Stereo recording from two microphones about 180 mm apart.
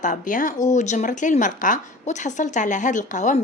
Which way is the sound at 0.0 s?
45° left (ahead or behind).